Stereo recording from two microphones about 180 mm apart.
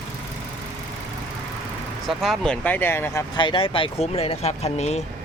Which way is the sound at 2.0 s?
Centre (ahead or behind).